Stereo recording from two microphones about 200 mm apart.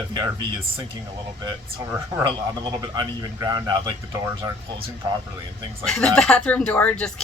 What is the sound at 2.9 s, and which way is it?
A man's voice, 20° right (ahead or behind).